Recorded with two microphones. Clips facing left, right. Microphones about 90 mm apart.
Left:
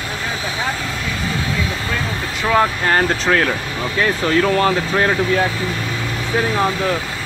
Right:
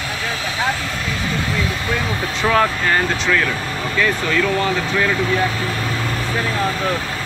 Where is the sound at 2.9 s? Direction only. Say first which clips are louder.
Left 2 dB; 40° left (ahead or behind).